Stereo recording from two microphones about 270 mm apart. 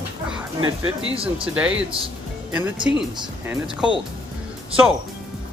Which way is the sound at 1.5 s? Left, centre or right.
Centre.